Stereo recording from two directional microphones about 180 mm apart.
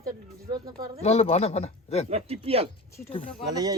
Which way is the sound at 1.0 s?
35° left (ahead or behind).